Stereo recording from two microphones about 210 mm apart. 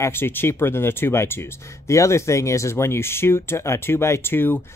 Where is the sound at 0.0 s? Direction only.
10° left (ahead or behind).